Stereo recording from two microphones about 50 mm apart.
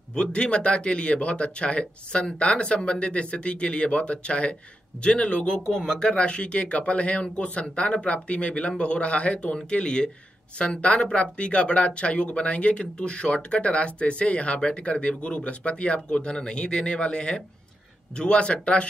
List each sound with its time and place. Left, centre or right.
0.1 s speech: centre